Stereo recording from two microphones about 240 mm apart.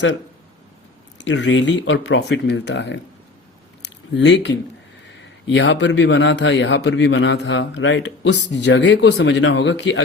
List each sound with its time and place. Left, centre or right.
1.2 s a man's voice: left
4.1 s a man's voice: left